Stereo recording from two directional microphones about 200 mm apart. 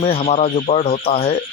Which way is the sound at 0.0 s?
30° left (ahead or behind).